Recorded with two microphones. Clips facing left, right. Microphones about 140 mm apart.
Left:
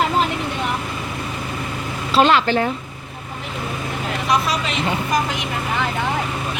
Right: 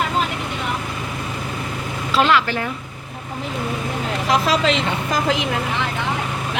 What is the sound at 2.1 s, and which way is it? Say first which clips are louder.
Speech: left 3 dB; 30° left (ahead or behind).